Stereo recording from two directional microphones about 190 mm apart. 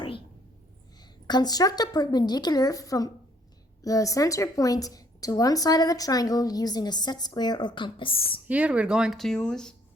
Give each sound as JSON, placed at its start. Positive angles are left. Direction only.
{"t": 1.3, "sound": "a woman's voice", "side_deg": 20}
{"t": 8.4, "sound": "speech", "side_deg": -5}